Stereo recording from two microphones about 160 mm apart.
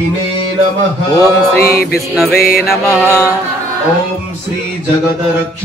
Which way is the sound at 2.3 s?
65° left (ahead or behind).